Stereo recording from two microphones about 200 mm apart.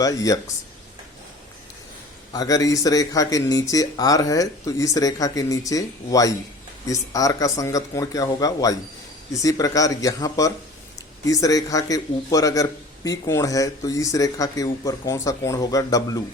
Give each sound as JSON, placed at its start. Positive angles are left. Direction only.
{"t": 0.0, "sound": "a man's voice", "side_deg": 15}
{"t": 2.3, "sound": "a man's voice", "side_deg": 15}